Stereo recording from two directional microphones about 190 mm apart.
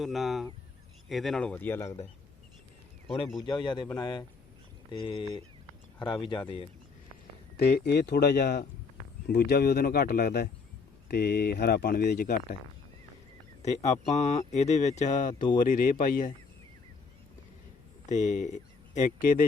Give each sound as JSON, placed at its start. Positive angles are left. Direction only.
{"t": 0.0, "sound": "speech", "side_deg": 0}
{"t": 3.4, "sound": "speech", "side_deg": 25}
{"t": 6.0, "sound": "speech", "side_deg": 25}
{"t": 7.5, "sound": "speech", "side_deg": 60}
{"t": 13.6, "sound": "speech", "side_deg": 35}
{"t": 18.0, "sound": "speech", "side_deg": 40}